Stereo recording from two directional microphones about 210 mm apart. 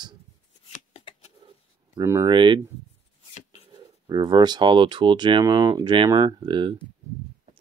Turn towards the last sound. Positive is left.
turn(degrees=-20)  # may be behind; listen again after turning